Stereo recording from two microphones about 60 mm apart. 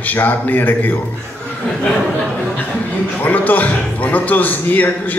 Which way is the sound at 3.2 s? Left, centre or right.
Left.